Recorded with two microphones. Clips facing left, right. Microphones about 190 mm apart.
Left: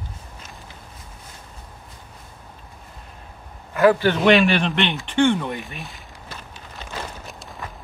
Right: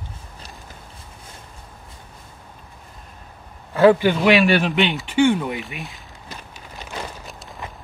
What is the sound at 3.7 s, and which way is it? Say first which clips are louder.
Speech: right 3 dB; 30° right (ahead or behind).